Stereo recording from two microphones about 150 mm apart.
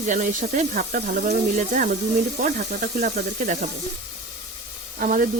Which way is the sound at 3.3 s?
55° right (ahead or behind).